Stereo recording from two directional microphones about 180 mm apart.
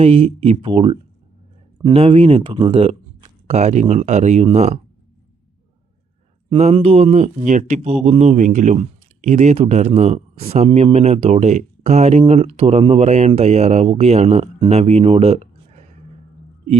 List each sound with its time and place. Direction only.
0.0 s speech: 30° right (ahead or behind)
6.5 s speech: 30° right (ahead or behind)